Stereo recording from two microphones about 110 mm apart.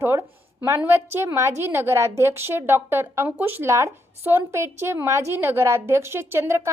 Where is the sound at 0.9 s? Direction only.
20° right (ahead or behind).